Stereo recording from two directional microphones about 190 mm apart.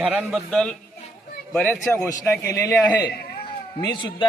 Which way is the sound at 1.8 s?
5° left (ahead or behind).